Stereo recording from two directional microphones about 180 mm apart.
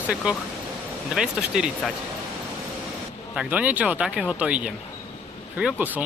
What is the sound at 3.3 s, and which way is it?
Speech, 5° right (ahead or behind).